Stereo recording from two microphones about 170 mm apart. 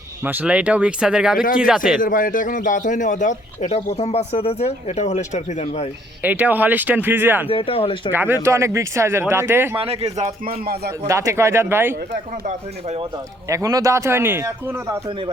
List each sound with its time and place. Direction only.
0.3 s speech: 10° right (ahead or behind)
2.0 s a man's voice: 55° left (ahead or behind)
6.2 s speech: 10° right (ahead or behind)
7.4 s speech: 35° left (ahead or behind)
8.1 s speech: 15° right (ahead or behind)
9.7 s speech: 35° right (ahead or behind)
10.4 s speech: 60° right (ahead or behind)
11.0 s speech: 15° right (ahead or behind)
13.5 s speech: 20° right (ahead or behind)